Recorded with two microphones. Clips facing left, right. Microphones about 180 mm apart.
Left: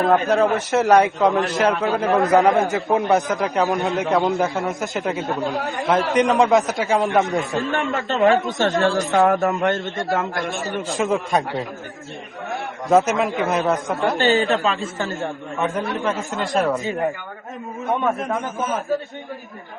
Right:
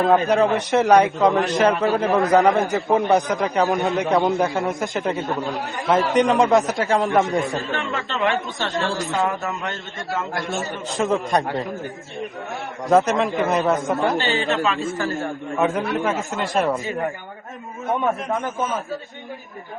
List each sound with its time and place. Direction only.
0.1 s a man's voice: centre (ahead or behind)
7.7 s speech: 45° left (ahead or behind)
10.9 s a man's voice: 5° left (ahead or behind)
12.9 s a man's voice: 5° left (ahead or behind)
14.2 s speech: 40° left (ahead or behind)
15.6 s a man's voice: 5° right (ahead or behind)